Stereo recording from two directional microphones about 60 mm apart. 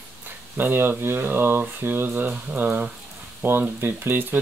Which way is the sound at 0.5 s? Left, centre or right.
Right.